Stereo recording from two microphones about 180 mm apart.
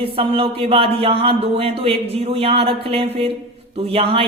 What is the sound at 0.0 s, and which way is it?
A man's voice, 30° right (ahead or behind).